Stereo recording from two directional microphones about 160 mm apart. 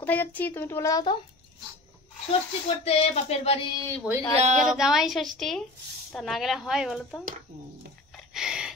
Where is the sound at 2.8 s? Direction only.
40° left (ahead or behind).